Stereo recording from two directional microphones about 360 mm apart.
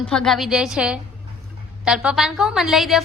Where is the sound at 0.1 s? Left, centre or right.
Centre.